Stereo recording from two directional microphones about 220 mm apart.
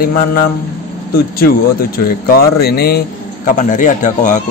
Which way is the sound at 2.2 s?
45° left (ahead or behind).